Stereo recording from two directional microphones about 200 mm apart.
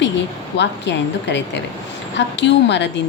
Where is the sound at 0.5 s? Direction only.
60° left (ahead or behind).